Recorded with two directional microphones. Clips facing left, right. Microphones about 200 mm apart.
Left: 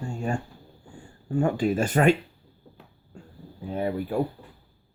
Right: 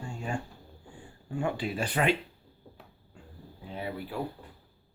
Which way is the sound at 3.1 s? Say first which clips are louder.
Left 6 dB; 45° left (ahead or behind).